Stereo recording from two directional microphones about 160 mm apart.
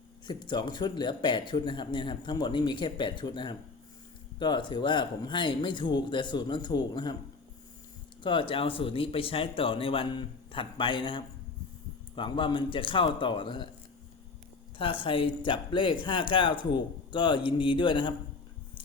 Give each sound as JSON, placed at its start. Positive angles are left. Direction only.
{"t": 0.3, "sound": "speech", "side_deg": 30}
{"t": 8.2, "sound": "speech", "side_deg": 30}
{"t": 14.8, "sound": "speech", "side_deg": 35}